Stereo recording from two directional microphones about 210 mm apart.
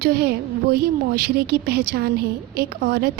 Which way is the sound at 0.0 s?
50° right (ahead or behind).